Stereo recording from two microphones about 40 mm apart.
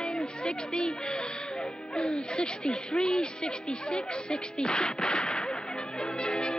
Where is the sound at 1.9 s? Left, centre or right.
Left.